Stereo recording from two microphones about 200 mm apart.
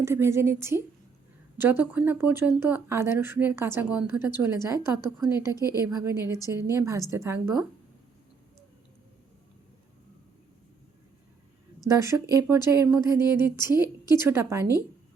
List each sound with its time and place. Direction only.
0.0 s speech: 15° right (ahead or behind)
11.9 s speech: 15° right (ahead or behind)